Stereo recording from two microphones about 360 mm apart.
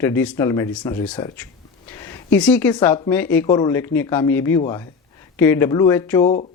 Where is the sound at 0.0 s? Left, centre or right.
Centre.